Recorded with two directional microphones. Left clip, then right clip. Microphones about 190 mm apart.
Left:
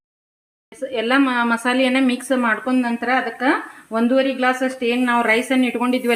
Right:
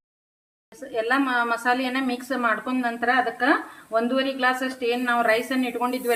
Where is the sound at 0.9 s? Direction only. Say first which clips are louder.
Left 4 dB; 45° left (ahead or behind).